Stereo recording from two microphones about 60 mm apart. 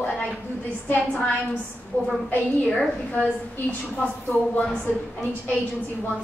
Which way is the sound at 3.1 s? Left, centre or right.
Left.